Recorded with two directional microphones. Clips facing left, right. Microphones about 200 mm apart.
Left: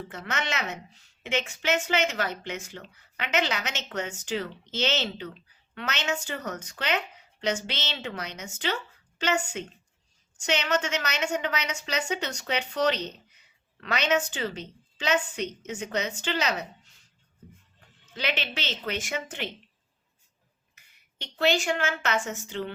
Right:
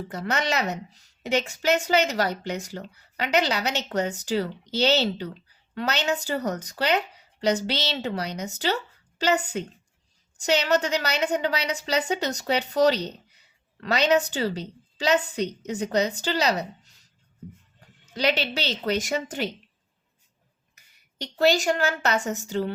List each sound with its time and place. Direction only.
0.1 s a woman's voice: 35° right (ahead or behind)
18.1 s a woman's voice: 35° right (ahead or behind)
20.7 s a woman's voice: 40° right (ahead or behind)